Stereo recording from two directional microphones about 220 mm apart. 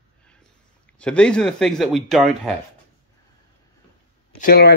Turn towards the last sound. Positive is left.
turn(degrees=45)  # may be behind; listen again after turning